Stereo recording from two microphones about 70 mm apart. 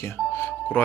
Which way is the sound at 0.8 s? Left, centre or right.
Left.